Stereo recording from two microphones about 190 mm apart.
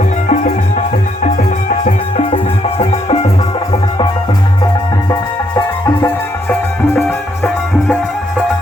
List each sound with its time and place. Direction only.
0.3 s music: 40° left (ahead or behind)